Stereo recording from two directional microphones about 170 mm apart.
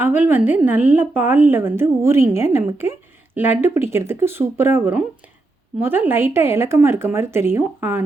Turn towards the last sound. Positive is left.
turn(degrees=-15)  # may be behind; listen again after turning